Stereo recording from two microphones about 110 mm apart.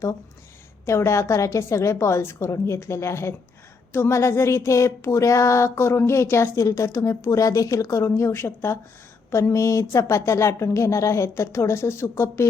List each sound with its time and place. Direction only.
0.9 s speech: 25° left (ahead or behind)